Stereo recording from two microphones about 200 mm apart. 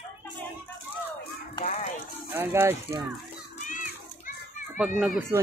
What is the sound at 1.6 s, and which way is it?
Music, 30° left (ahead or behind).